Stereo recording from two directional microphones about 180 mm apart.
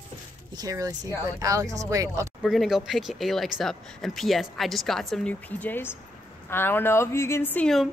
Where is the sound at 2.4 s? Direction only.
Centre (ahead or behind).